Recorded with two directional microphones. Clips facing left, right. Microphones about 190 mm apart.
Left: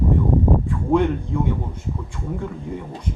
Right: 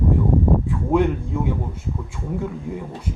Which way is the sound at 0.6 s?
5° right (ahead or behind).